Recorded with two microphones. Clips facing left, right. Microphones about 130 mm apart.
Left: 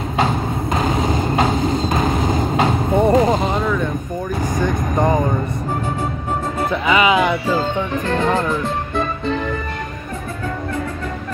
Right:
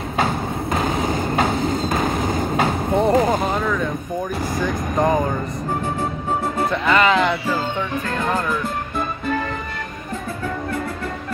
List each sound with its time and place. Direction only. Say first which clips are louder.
0.2 s a sound: left 2 dB; 20° left (ahead or behind)
1.0 s vehicle: left 2 dB; 20° left (ahead or behind)
2.9 s a sound: left 2 dB; centre (ahead or behind)
4.6 s vehicle: left 2 dB; centre (ahead or behind)
6.7 s music: left 2 dB; 5° left (ahead or behind)
8.1 s speech: left 5 dB; 25° left (ahead or behind)